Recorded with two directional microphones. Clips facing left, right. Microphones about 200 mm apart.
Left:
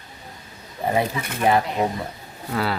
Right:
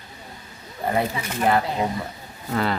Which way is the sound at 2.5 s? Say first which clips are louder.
Right 1 dB; 5° left (ahead or behind).